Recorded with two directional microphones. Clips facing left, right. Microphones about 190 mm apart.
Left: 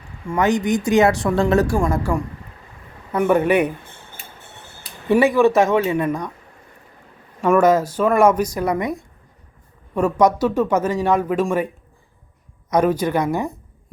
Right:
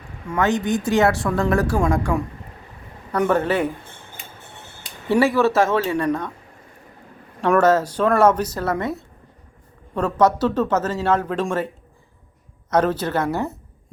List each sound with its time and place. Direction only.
0.3 s speech: 15° left (ahead or behind)
1.9 s a woman's voice: 5° left (ahead or behind)
5.2 s speech: 15° left (ahead or behind)
7.4 s speech: 5° left (ahead or behind)
12.7 s speech: 10° left (ahead or behind)